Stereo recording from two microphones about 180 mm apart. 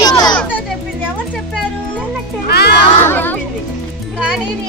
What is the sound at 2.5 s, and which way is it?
Music, 65° left (ahead or behind).